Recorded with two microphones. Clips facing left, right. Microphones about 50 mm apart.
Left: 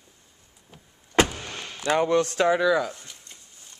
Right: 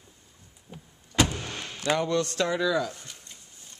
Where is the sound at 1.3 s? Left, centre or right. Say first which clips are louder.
Right 1 dB; centre.